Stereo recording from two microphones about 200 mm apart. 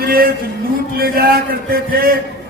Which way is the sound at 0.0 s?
50° right (ahead or behind).